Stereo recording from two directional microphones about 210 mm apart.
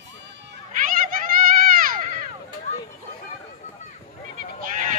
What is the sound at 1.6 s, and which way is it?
Baby cry, 45° right (ahead or behind).